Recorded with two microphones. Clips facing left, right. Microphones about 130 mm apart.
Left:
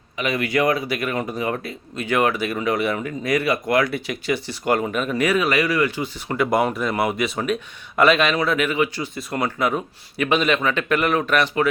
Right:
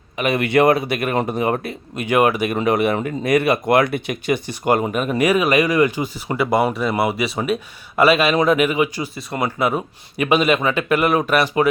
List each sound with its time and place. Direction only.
0.2 s speech: 55° right (ahead or behind)
2.0 s speech: 15° right (ahead or behind)
2.6 s speech: 55° right (ahead or behind)
2.9 s speech: 35° right (ahead or behind)
3.2 s speech: 60° right (ahead or behind)
5.1 s speech: 15° right (ahead or behind)